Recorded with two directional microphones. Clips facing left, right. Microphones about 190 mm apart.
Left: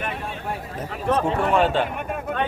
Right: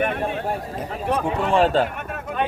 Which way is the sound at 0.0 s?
55° right (ahead or behind).